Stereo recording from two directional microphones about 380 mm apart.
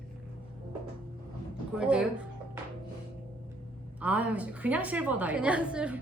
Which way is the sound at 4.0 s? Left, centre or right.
Centre.